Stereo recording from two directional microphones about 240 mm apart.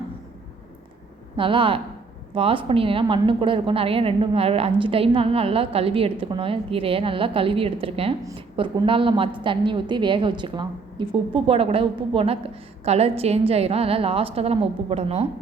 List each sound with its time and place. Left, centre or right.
1.4 s a woman's voice: right